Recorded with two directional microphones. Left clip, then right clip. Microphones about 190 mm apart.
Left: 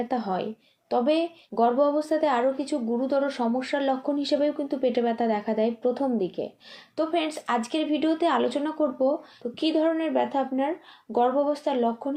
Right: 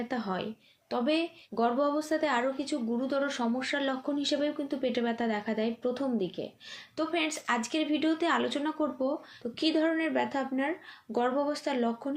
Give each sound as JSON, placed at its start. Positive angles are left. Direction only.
{"t": 0.1, "sound": "a woman's voice", "side_deg": -20}
{"t": 9.6, "sound": "speech", "side_deg": -10}